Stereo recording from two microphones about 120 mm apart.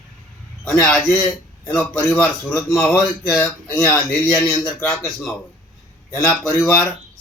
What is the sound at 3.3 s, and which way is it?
Speech, 10° left (ahead or behind).